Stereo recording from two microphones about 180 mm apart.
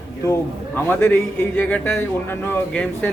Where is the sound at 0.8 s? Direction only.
10° left (ahead or behind).